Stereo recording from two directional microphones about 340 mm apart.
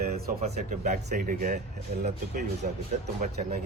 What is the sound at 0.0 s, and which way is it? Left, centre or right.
Speech, centre.